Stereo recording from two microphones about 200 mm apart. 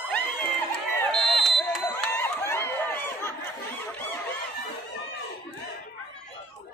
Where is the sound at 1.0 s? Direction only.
Centre (ahead or behind).